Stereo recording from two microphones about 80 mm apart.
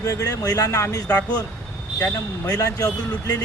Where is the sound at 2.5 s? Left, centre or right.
Left.